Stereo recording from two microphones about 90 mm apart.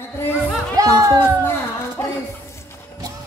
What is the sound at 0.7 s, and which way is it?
Speech, 45° right (ahead or behind).